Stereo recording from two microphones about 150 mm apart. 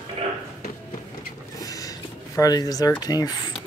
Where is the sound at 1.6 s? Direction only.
25° left (ahead or behind).